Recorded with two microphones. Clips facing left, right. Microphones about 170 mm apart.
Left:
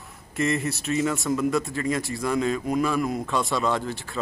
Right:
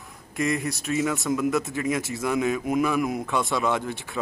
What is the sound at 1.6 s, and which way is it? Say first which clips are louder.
Speech: even; 10° right (ahead or behind).